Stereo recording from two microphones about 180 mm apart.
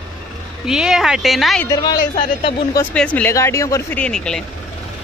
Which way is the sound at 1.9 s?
50° left (ahead or behind).